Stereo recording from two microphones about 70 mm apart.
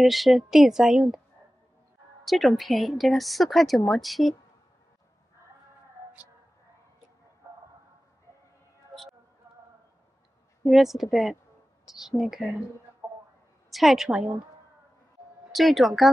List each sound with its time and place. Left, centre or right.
0.0 s a woman's voice: centre
2.2 s a woman's voice: centre
10.6 s a woman's voice: centre
13.7 s a woman's voice: centre
15.5 s a woman's voice: centre